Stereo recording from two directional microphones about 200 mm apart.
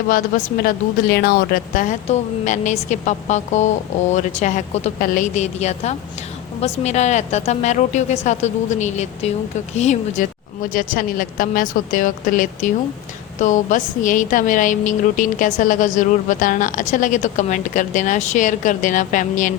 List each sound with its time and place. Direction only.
0.1 s a woman's voice: 45° left (ahead or behind)